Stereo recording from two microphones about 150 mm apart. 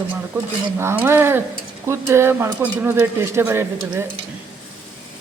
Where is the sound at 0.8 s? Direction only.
15° right (ahead or behind).